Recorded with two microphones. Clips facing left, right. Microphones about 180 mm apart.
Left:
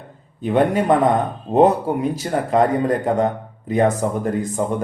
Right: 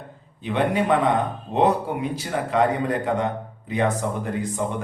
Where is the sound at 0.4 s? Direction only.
45° left (ahead or behind).